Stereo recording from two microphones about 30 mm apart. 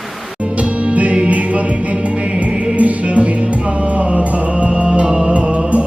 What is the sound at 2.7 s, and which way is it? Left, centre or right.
Music, right.